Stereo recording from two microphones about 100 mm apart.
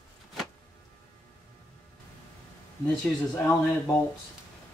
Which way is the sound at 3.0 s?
25° left (ahead or behind).